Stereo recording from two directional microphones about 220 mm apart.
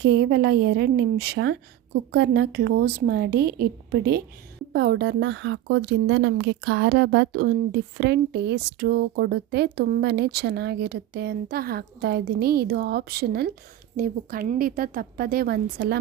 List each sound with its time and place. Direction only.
0.0 s a woman's voice: 50° right (ahead or behind)